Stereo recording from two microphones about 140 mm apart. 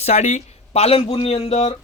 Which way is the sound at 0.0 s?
55° left (ahead or behind).